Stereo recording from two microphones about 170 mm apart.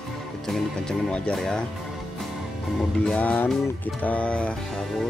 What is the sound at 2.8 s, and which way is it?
Music, 5° left (ahead or behind).